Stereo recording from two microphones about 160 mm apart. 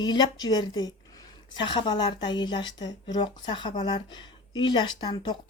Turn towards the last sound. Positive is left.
turn(degrees=25)  # may be behind; listen again after turning